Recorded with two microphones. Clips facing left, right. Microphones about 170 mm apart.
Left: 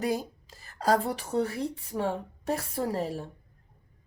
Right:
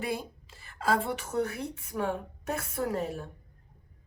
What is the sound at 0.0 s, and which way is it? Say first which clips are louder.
Speech: left 4 dB; 40° left (ahead or behind).